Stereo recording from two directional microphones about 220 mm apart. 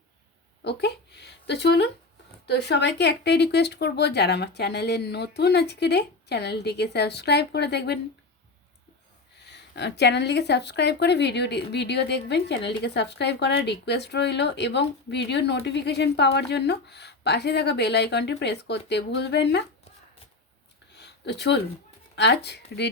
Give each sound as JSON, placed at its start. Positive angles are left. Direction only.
{"t": 0.6, "sound": "speech", "side_deg": 50}
{"t": 9.4, "sound": "speech", "side_deg": 50}
{"t": 20.9, "sound": "a sound", "side_deg": 50}
{"t": 22.1, "sound": "speech", "side_deg": 50}